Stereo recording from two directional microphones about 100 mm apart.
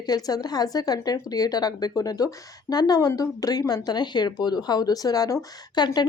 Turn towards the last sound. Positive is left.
turn(degrees=45)  # may be behind; listen again after turning